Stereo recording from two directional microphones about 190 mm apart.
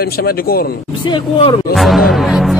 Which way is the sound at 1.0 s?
25° left (ahead or behind).